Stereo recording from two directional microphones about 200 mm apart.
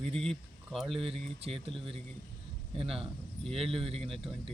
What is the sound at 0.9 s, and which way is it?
Speech, 30° right (ahead or behind).